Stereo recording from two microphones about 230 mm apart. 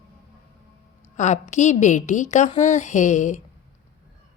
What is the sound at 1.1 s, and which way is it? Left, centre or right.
A woman's voice, left.